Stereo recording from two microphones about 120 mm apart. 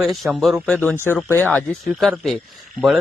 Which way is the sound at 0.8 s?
20° left (ahead or behind).